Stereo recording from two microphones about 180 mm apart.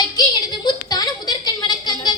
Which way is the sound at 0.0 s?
20° left (ahead or behind).